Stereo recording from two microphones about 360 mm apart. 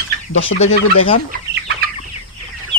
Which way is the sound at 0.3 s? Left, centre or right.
Left.